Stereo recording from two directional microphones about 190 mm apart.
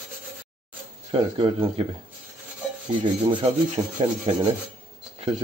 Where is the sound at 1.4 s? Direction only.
25° right (ahead or behind).